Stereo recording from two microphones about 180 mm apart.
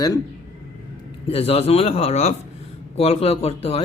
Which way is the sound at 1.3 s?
30° left (ahead or behind).